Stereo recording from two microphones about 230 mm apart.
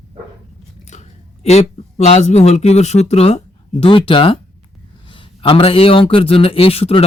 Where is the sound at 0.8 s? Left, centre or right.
Left.